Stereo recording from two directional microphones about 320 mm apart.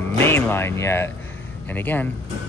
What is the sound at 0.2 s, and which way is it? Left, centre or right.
Speech, centre.